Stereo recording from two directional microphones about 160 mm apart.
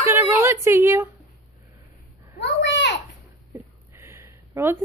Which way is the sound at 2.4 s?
90° left.